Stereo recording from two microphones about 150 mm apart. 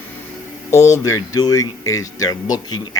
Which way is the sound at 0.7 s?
20° left (ahead or behind).